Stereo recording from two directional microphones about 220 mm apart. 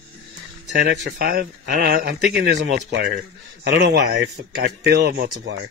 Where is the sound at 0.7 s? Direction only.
45° right (ahead or behind).